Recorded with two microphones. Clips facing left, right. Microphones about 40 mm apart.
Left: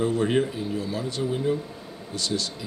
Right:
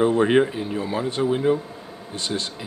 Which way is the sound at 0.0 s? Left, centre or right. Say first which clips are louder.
Right 5 dB; right.